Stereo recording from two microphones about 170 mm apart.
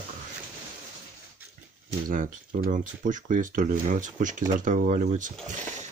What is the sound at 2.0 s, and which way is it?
Speech, 55° right (ahead or behind).